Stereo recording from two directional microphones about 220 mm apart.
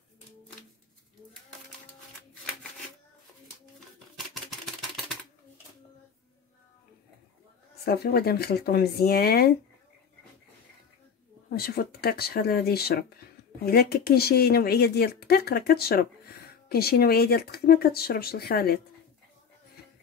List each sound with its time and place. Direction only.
4.3 s a sound: centre (ahead or behind)
7.8 s speech: 45° left (ahead or behind)
11.5 s speech: 45° left (ahead or behind)